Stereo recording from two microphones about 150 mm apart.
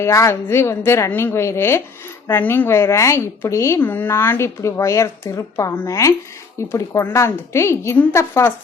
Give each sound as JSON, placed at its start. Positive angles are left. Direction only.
{"t": 0.0, "sound": "a woman's voice", "side_deg": 20}